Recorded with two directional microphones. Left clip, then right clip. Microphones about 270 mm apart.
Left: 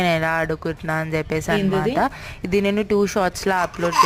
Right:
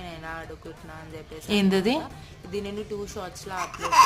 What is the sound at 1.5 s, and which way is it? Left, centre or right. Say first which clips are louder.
Speech: left 1 dB; centre.